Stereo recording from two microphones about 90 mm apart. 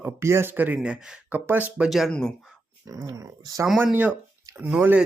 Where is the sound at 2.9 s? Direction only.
40° right (ahead or behind).